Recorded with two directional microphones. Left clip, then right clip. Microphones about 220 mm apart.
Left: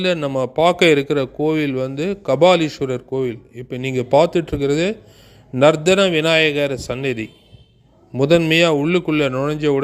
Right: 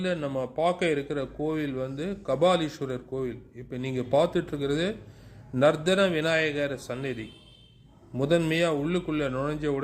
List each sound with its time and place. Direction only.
0.0 s a man's voice: 40° left (ahead or behind)